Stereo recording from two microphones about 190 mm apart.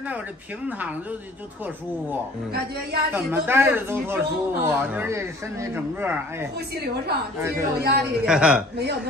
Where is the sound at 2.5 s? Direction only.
55° right (ahead or behind).